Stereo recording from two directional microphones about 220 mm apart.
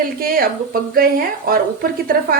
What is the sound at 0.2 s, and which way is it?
Speech, 40° right (ahead or behind).